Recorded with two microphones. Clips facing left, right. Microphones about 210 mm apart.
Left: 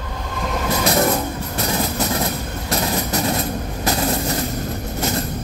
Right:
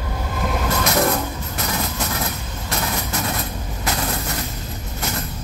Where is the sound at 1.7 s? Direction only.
30° left (ahead or behind).